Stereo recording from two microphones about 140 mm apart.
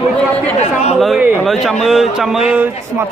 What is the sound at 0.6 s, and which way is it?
Speech, 55° left (ahead or behind).